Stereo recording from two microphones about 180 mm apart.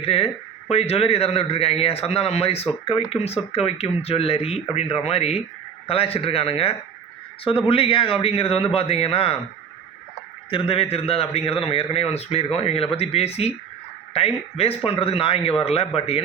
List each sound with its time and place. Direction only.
0.0 s a man's voice: 35° left (ahead or behind)
10.5 s a man's voice: 35° left (ahead or behind)